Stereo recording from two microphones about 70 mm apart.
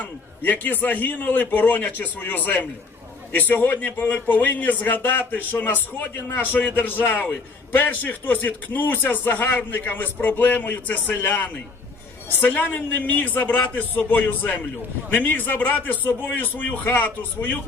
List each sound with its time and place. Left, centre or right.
0.0 s a man's voice: left